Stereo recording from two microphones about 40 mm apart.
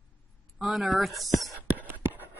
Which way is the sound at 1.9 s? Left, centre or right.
Right.